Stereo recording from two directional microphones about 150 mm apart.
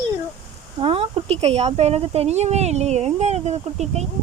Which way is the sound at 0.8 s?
35° right (ahead or behind).